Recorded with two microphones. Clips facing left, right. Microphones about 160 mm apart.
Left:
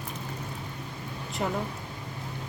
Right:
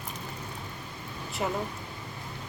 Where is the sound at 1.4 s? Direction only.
5° right (ahead or behind).